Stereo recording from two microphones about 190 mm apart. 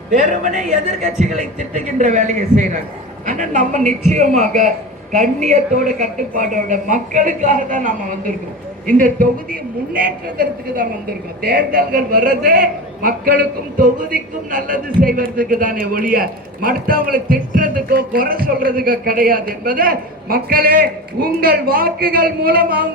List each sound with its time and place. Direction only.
0.1 s a man's voice: 40° right (ahead or behind)